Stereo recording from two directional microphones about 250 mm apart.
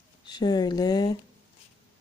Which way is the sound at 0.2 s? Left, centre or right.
Centre.